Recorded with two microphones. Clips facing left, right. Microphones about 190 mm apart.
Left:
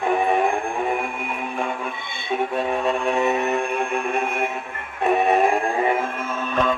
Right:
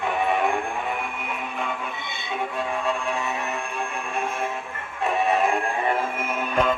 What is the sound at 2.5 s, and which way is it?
Vehicle, 60° left (ahead or behind).